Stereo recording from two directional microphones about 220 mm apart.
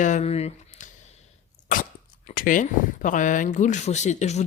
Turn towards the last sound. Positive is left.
turn(degrees=30)  # may be behind; listen again after turning